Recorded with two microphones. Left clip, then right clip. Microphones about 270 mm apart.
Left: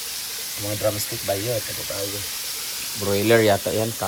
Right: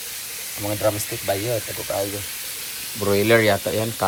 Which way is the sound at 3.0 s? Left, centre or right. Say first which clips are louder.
Right 1 dB; centre.